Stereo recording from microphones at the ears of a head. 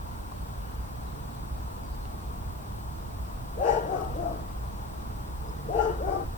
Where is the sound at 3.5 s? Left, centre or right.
Left.